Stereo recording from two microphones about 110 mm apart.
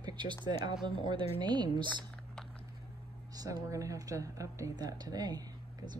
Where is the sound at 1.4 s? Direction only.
40° right (ahead or behind).